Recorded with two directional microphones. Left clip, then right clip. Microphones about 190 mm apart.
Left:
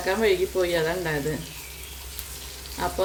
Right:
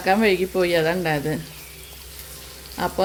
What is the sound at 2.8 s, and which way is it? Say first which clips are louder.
Speech: right 3 dB; 45° right (ahead or behind).